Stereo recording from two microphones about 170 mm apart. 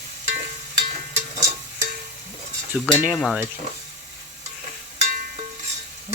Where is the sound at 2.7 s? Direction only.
5° left (ahead or behind).